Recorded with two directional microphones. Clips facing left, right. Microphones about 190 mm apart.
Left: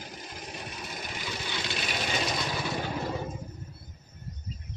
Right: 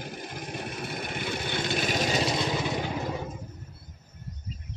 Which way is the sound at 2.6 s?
15° right (ahead or behind).